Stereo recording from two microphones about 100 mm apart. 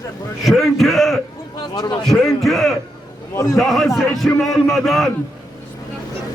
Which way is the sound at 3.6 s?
5° left (ahead or behind).